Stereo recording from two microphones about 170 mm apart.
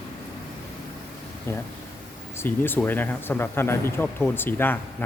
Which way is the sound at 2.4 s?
10° left (ahead or behind).